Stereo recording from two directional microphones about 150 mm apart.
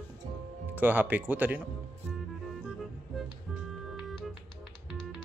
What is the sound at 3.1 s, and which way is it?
Music, centre (ahead or behind).